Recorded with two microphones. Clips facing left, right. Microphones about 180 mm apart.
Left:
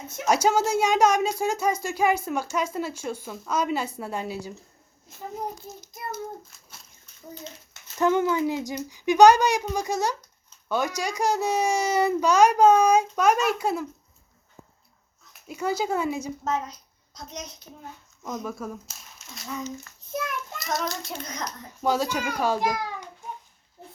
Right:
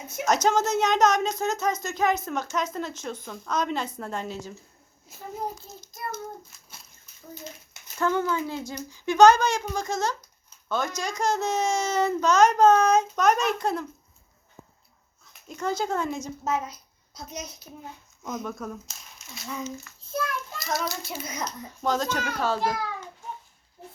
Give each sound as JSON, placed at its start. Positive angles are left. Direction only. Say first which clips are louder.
{"t": 0.3, "sound": "speech", "louder": "left 1 dB", "side_deg": 10}
{"t": 5.1, "sound": "a woman's voice", "louder": "left 3 dB", "side_deg": -5}
{"t": 6.5, "sound": "a sound", "louder": "left 1 dB", "side_deg": 0}
{"t": 7.9, "sound": "speech", "louder": "left 3 dB", "side_deg": 15}
{"t": 15.3, "sound": "speech", "louder": "left 2 dB", "side_deg": 5}
{"t": 16.4, "sound": "a woman's voice", "louder": "right 3 dB", "side_deg": -5}
{"t": 18.2, "sound": "speech", "louder": "left 1 dB", "side_deg": 0}
{"t": 20.1, "sound": "child singing", "louder": "right 1 dB", "side_deg": 20}
{"t": 20.7, "sound": "a child's voice", "louder": "even", "side_deg": -5}
{"t": 21.8, "sound": "speech", "louder": "left 2 dB", "side_deg": 10}